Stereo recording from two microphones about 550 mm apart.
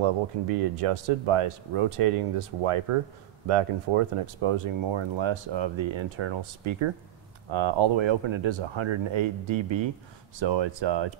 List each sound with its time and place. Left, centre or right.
0.0 s speech: right